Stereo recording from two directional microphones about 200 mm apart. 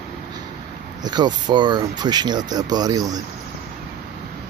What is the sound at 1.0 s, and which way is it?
Speech, 20° right (ahead or behind).